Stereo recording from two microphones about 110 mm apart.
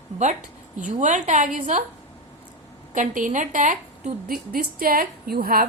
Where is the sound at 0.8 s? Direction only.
90° right.